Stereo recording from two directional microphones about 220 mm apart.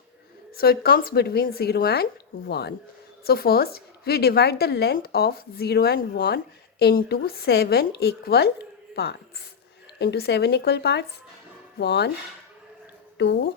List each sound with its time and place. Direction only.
0.5 s a woman's voice: 45° left (ahead or behind)
10.0 s a woman's voice: 50° left (ahead or behind)
13.1 s speech: 50° left (ahead or behind)